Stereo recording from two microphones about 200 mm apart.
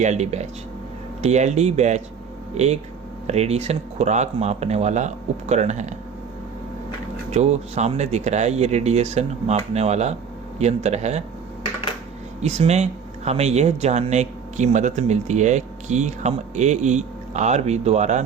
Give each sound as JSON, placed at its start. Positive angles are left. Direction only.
{"t": 0.0, "sound": "speech", "side_deg": -35}
{"t": 3.2, "sound": "speech", "side_deg": -30}
{"t": 7.3, "sound": "speech", "side_deg": -30}
{"t": 12.4, "sound": "speech", "side_deg": -35}